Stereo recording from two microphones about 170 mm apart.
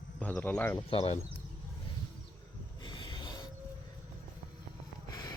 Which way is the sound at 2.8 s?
25° left (ahead or behind).